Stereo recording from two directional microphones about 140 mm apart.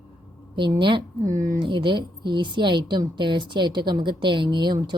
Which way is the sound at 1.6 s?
35° right (ahead or behind).